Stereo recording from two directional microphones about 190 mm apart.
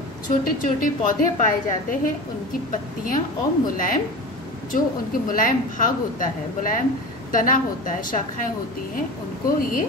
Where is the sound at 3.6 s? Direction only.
45° left (ahead or behind).